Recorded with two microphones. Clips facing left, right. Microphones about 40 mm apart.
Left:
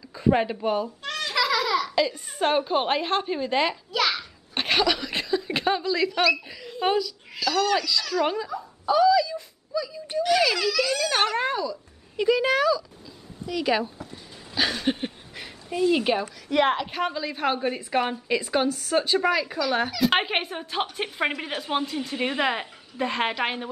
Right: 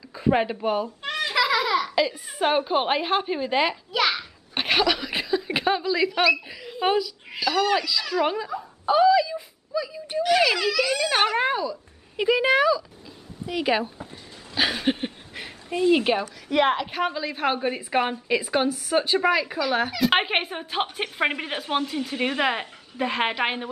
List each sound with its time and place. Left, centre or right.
0.1 s speech: centre
1.0 s a sound: centre
8.8 s wail: right
10.2 s speech: centre